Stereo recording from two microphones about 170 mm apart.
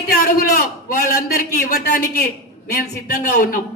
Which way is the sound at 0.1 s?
60° left (ahead or behind).